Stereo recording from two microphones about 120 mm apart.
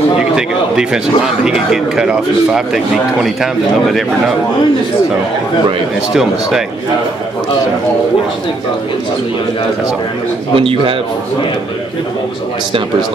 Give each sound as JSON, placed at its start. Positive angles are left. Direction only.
{"t": 0.4, "sound": "speech", "side_deg": -5}
{"t": 10.5, "sound": "a man's voice", "side_deg": -50}